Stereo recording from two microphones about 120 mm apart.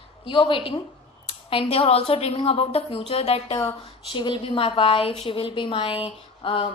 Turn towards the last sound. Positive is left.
turn(degrees=50)  # may be behind; listen again after turning